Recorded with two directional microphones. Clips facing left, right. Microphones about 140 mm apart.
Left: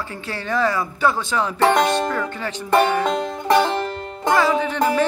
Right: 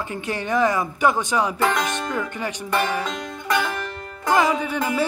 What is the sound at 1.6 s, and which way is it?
Music, 30° left (ahead or behind).